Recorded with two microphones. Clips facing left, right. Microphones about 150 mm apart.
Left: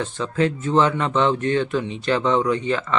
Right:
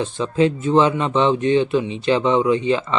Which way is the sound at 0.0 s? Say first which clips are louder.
Right 4 dB; 20° right (ahead or behind).